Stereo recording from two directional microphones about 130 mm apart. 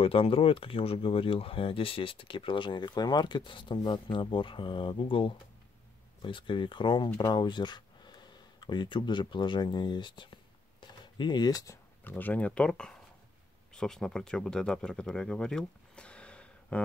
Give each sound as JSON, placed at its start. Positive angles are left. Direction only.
{"t": 0.0, "sound": "speech", "side_deg": 45}
{"t": 12.0, "sound": "speech", "side_deg": 15}